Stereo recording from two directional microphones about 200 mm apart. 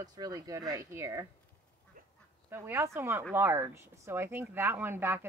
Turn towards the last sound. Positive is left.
turn(degrees=-10)  # may be behind; listen again after turning